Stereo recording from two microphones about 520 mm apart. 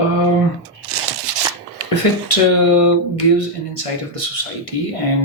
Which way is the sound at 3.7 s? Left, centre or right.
Left.